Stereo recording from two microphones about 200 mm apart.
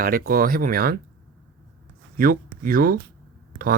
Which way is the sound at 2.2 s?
45° right (ahead or behind).